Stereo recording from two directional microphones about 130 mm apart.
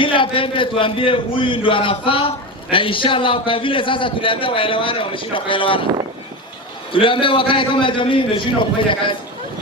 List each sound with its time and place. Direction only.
0.0 s a man's voice: 40° left (ahead or behind)
6.9 s a man's voice: 40° left (ahead or behind)